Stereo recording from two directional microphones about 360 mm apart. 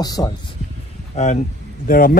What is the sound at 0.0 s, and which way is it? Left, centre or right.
Speech, centre.